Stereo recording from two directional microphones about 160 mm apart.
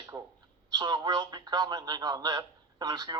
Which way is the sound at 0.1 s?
25° right (ahead or behind).